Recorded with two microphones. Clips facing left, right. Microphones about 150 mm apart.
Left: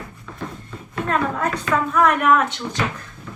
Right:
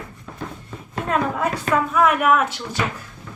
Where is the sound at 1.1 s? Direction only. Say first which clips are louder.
Even; 10° right (ahead or behind).